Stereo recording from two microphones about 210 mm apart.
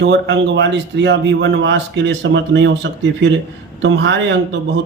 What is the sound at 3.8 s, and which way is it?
Speech, 60° right (ahead or behind).